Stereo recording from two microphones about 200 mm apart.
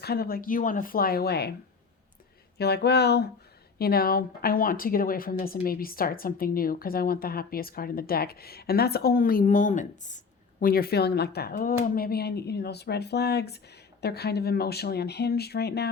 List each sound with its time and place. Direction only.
0.0 s speech: 50° left (ahead or behind)
2.6 s speech: 55° left (ahead or behind)